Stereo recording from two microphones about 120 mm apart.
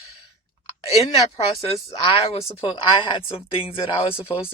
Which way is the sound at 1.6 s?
55° left (ahead or behind).